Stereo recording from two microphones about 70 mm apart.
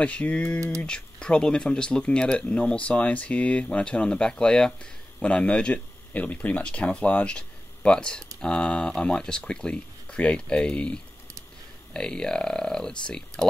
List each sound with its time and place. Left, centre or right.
0.0 s speech: centre